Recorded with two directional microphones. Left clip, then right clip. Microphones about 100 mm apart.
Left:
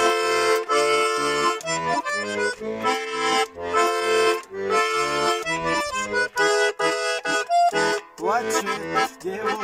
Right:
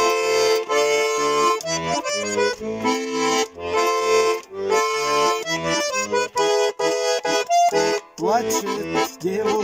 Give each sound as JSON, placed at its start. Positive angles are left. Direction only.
{"t": 0.0, "sound": "accordion", "side_deg": -40}